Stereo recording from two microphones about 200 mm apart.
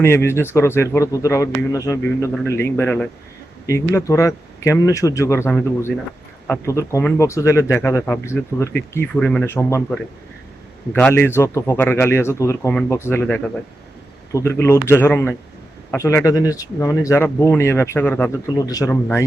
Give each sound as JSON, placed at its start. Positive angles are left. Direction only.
{"t": 0.0, "sound": "speech", "side_deg": 10}
{"t": 10.9, "sound": "speech", "side_deg": 10}